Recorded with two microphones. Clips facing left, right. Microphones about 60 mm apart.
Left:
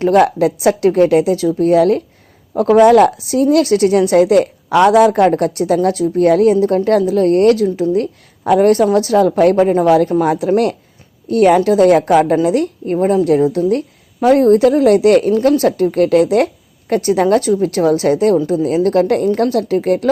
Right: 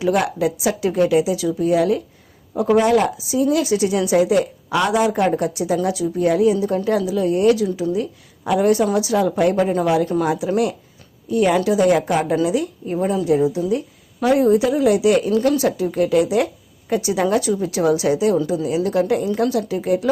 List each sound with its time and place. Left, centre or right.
0.0 s speech: left
0.3 s a woman's voice: left
2.6 s a woman's voice: left
9.6 s a woman's voice: left
9.8 s speech: left
10.2 s a woman's voice: left
12.2 s speech: left
13.2 s a woman's voice: left
15.3 s a woman's voice: left